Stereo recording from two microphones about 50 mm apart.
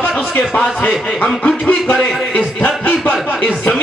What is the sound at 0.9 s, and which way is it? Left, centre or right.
Speech, centre.